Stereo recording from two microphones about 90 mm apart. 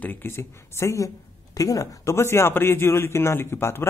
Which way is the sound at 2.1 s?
30° left (ahead or behind).